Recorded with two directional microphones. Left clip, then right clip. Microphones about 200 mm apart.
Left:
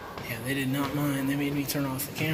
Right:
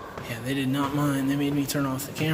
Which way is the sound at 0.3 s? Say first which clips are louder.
Right 2 dB; 20° right (ahead or behind).